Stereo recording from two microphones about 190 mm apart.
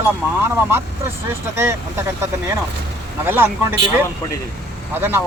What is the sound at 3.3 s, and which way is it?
Speech, 10° right (ahead or behind).